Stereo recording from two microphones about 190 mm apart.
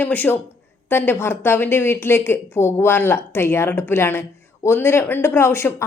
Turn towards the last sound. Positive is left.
turn(degrees=15)  # may be behind; listen again after turning